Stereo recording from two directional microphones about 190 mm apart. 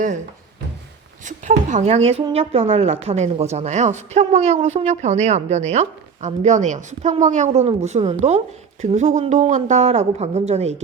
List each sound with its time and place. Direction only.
1.2 s speech: 40° right (ahead or behind)